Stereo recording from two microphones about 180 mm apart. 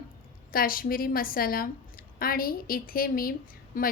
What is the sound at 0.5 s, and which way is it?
A woman's voice, 55° left (ahead or behind).